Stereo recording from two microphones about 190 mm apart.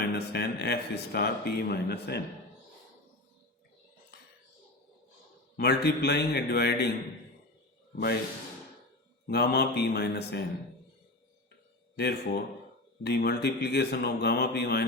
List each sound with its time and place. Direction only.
0.0 s speech: 60° left (ahead or behind)
5.5 s speech: 55° left (ahead or behind)
7.9 s speech: 60° left (ahead or behind)
9.2 s speech: 55° left (ahead or behind)
11.9 s speech: 60° left (ahead or behind)